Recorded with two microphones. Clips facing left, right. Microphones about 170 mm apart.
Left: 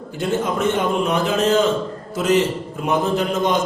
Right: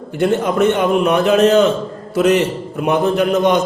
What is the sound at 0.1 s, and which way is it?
A man's voice, 65° right (ahead or behind).